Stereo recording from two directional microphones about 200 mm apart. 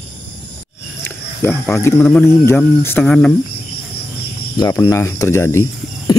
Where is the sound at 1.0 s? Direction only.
10° left (ahead or behind).